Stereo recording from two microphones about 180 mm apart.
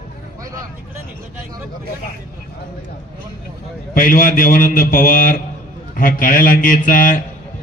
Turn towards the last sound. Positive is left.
turn(degrees=50)  # may be behind; listen again after turning